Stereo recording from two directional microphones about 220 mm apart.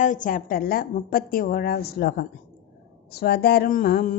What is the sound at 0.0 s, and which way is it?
A woman's voice, 35° left (ahead or behind).